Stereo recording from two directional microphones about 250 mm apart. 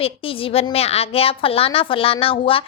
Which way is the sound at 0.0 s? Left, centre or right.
Left.